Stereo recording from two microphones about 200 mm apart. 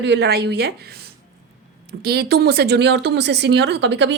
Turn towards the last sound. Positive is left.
turn(degrees=-65)  # may be behind; listen again after turning